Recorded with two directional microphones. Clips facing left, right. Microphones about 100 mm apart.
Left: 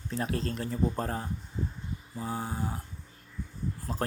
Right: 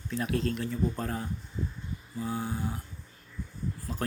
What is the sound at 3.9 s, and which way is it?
Speech, 40° left (ahead or behind).